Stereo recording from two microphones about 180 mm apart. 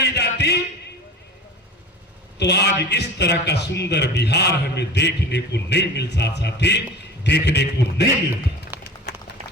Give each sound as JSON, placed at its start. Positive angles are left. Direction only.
{"t": 0.0, "sound": "a sound", "side_deg": 70}
{"t": 2.4, "sound": "a man's voice", "side_deg": 70}
{"t": 8.7, "sound": "run", "side_deg": -10}